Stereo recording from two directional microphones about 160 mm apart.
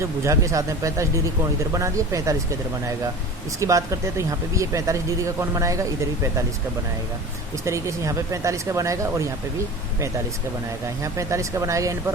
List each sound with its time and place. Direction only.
0.0 s speech: 20° right (ahead or behind)
3.6 s speech: 20° right (ahead or behind)
7.6 s speech: 20° right (ahead or behind)
11.0 s speech: 20° right (ahead or behind)